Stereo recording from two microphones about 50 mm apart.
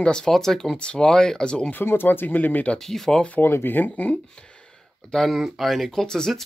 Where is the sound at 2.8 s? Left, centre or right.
Centre.